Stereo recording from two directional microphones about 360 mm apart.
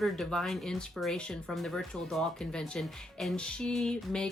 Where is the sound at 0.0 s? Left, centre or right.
Centre.